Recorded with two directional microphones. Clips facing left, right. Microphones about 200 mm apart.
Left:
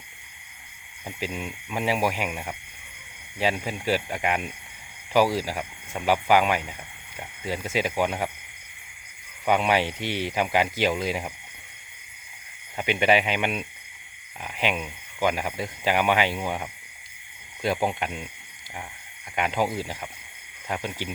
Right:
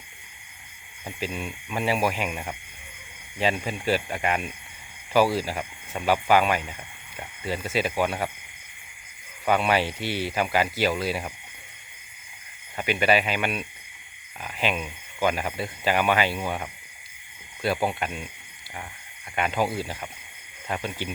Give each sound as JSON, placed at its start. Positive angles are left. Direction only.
{"t": 1.2, "sound": "speech", "side_deg": 15}
{"t": 9.5, "sound": "speech", "side_deg": 15}
{"t": 12.7, "sound": "speech", "side_deg": 20}
{"t": 19.4, "sound": "speech", "side_deg": 15}